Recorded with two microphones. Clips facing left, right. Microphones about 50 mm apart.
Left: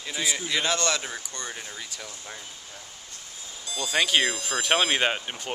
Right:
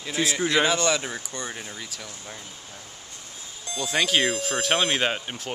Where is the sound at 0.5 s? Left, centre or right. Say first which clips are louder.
Right 4 dB; centre.